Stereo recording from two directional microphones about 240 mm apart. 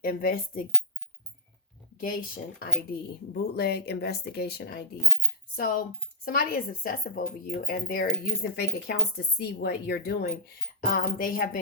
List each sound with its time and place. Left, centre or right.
0.0 s speech: left
2.0 s speech: left